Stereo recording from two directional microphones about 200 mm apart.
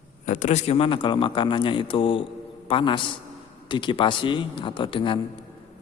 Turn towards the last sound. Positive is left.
turn(degrees=25)  # may be behind; listen again after turning